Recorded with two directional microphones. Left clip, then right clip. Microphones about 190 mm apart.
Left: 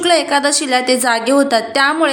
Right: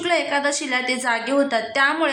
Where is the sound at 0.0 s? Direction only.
25° left (ahead or behind).